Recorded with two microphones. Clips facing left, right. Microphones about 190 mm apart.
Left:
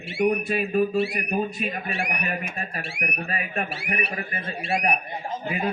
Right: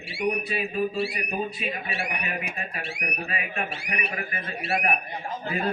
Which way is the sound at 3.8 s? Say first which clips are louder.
Left 4 dB; 55° left (ahead or behind).